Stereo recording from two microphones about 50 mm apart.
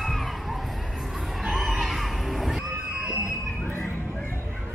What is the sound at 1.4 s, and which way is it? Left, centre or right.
Neigh, centre.